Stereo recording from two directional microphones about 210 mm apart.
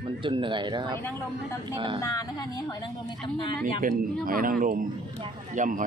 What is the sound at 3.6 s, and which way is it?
Speech, 40° right (ahead or behind).